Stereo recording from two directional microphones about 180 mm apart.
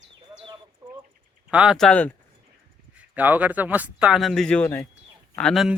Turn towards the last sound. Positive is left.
turn(degrees=0)  # may be behind; listen again after turning